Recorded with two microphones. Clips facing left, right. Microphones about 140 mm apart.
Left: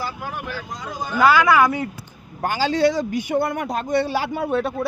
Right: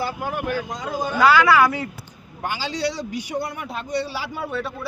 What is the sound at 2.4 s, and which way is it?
A man's voice, 45° left (ahead or behind).